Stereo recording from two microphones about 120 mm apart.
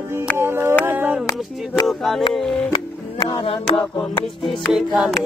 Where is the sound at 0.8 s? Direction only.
15° right (ahead or behind).